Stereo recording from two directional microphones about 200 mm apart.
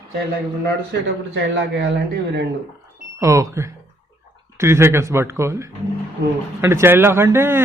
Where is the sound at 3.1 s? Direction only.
15° right (ahead or behind).